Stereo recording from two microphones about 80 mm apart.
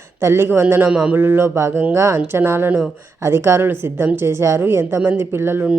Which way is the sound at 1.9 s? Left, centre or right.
Right.